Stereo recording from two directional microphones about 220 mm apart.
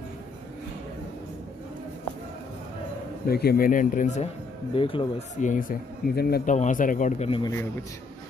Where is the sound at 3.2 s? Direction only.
45° left (ahead or behind).